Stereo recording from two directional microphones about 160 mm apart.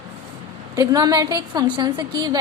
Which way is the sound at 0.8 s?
25° right (ahead or behind).